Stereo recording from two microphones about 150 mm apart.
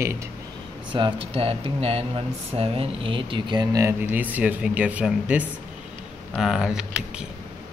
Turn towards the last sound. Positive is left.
turn(degrees=-5)  # may be behind; listen again after turning